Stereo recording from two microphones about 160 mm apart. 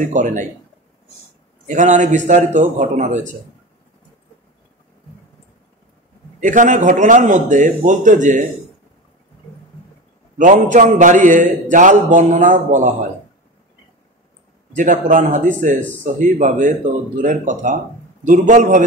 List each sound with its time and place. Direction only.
0.1 s a man's voice: 50° right (ahead or behind)
1.7 s a man's voice: 50° right (ahead or behind)
6.4 s a man's voice: 50° right (ahead or behind)
10.3 s a man's voice: 50° right (ahead or behind)
14.8 s a man's voice: 50° right (ahead or behind)